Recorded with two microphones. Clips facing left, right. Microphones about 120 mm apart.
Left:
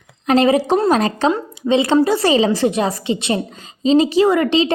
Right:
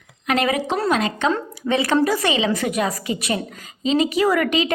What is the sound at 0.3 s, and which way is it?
A woman's voice, 35° left (ahead or behind).